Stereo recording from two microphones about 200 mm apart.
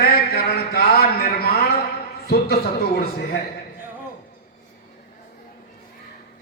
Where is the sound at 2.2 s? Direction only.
50° left (ahead or behind).